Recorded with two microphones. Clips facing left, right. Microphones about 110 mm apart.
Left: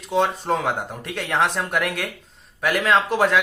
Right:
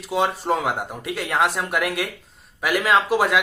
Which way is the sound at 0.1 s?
5° right (ahead or behind).